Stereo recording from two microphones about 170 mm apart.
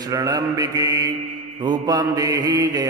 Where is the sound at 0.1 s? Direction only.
20° right (ahead or behind).